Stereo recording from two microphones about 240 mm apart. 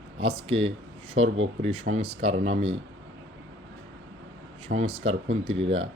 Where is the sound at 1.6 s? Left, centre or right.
Right.